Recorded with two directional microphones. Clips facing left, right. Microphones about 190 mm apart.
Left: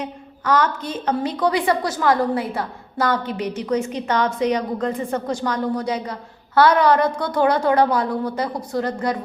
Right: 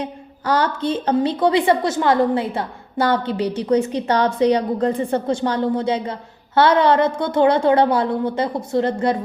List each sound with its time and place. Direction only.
0.0 s a woman's voice: 30° right (ahead or behind)